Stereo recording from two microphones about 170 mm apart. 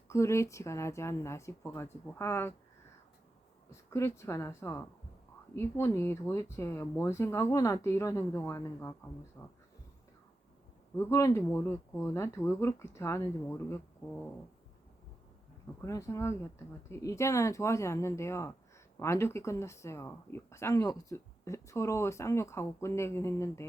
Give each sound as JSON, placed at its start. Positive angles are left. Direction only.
{"t": 0.1, "sound": "speech", "side_deg": 15}
{"t": 3.8, "sound": "speech", "side_deg": 15}
{"t": 10.9, "sound": "speech", "side_deg": 15}
{"t": 15.8, "sound": "speech", "side_deg": 15}